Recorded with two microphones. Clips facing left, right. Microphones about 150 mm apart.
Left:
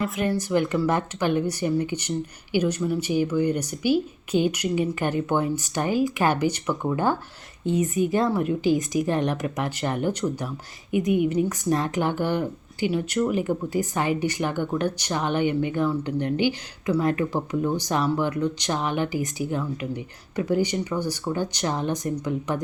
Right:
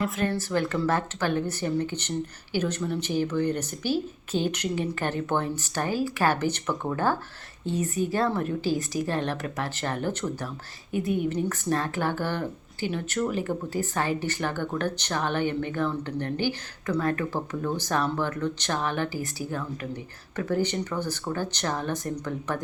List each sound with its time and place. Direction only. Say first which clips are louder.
0.3 s speech: left 4 dB; 15° left (ahead or behind)